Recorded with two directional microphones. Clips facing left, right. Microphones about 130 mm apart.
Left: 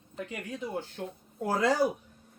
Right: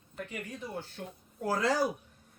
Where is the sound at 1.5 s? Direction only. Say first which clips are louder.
Left 3 dB; 20° left (ahead or behind).